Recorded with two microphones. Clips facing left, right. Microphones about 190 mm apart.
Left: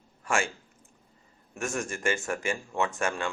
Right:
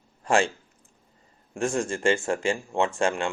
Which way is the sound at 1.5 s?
30° right (ahead or behind).